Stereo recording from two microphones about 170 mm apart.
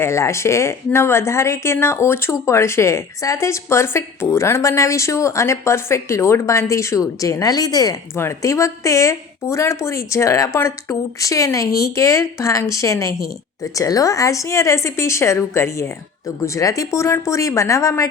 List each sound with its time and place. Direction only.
0.0 s speech: 15° left (ahead or behind)